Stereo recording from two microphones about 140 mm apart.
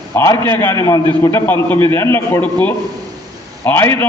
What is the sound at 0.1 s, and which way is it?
A man's voice, 20° left (ahead or behind).